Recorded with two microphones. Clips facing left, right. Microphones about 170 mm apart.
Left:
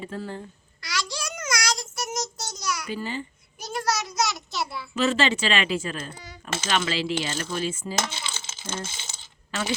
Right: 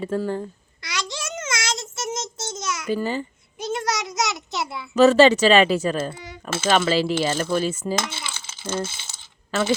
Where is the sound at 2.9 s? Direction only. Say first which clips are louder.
Right 7 dB; 45° right (ahead or behind).